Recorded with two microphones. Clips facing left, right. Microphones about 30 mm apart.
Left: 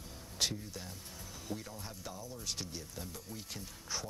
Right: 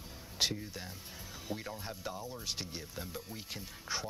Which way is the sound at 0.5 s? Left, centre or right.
Right.